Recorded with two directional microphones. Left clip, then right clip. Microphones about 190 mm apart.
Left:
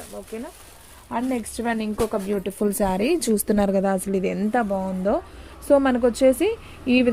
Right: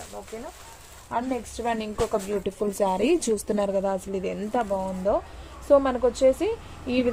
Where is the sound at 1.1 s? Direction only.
50° left (ahead or behind).